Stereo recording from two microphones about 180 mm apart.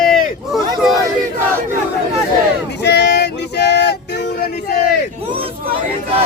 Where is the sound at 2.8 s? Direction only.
70° left (ahead or behind).